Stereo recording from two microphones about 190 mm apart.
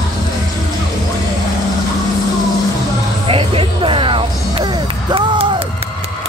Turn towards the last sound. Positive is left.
turn(degrees=-25)  # may be behind; listen again after turning